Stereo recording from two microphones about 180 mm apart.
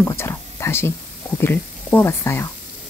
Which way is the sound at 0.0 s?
15° left (ahead or behind).